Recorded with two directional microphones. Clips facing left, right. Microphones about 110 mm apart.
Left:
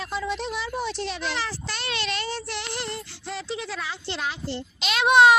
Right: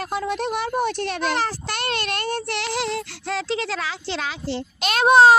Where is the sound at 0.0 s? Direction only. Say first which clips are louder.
Right 4 dB; 55° right (ahead or behind).